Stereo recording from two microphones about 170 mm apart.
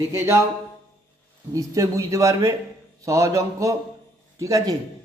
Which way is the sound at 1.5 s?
20° right (ahead or behind).